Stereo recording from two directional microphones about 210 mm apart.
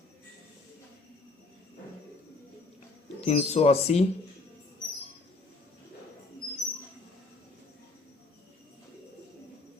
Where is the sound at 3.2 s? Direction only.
30° left (ahead or behind).